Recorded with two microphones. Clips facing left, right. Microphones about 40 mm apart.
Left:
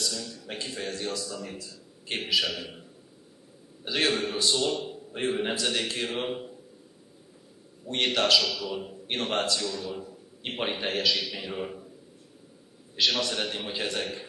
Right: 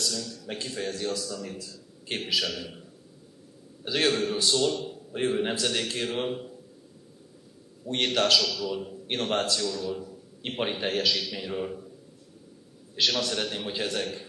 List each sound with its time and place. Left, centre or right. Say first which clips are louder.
0.0 s a man's voice: right 1 dB; centre
3.8 s a man's voice: right 1 dB; centre
7.8 s a man's voice: right 1 dB; centre
12.9 s a man's voice: even; centre